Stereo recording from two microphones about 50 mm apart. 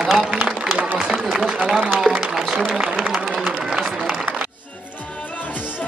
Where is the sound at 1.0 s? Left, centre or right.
Centre.